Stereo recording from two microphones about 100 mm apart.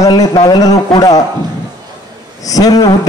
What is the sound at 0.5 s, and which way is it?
Speech, 40° left (ahead or behind).